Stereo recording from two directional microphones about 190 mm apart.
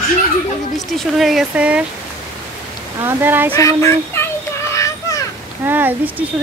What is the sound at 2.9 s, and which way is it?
Speech, 10° right (ahead or behind).